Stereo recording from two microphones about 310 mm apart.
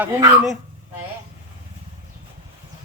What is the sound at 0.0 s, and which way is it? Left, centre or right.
Speech, centre.